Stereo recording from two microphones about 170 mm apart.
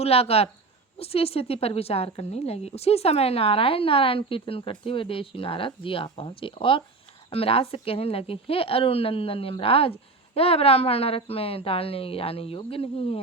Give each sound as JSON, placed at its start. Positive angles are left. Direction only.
{"t": 0.0, "sound": "a woman's voice", "side_deg": 35}